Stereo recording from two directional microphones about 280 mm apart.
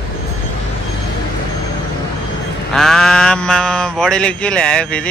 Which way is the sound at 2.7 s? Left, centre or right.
Centre.